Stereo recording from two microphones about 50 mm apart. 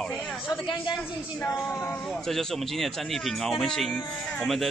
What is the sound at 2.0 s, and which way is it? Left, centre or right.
Speech, centre.